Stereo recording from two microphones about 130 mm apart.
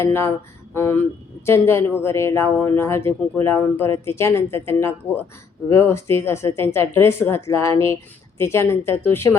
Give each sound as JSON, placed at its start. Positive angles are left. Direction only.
{"t": 0.0, "sound": "speech", "side_deg": 20}